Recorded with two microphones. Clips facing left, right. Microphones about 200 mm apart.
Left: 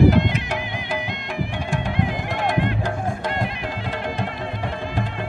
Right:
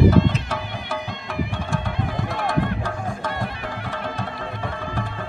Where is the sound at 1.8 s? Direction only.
15° left (ahead or behind).